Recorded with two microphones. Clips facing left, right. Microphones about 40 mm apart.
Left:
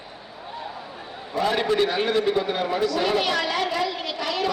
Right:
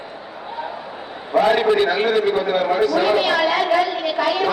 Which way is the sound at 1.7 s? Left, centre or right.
Right.